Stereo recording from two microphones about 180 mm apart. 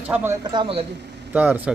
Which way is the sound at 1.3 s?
10° right (ahead or behind).